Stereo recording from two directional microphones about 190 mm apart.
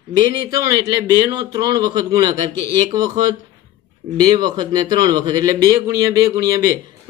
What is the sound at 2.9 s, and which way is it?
A man's voice, 20° right (ahead or behind).